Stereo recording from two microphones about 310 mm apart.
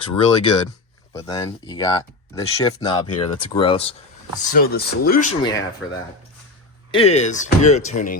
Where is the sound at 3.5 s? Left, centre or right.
Centre.